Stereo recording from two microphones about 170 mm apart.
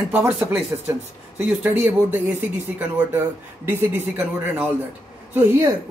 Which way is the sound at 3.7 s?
10° right (ahead or behind).